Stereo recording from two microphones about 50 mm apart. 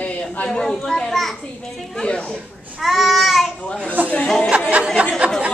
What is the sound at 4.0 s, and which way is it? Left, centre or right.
Speech, right.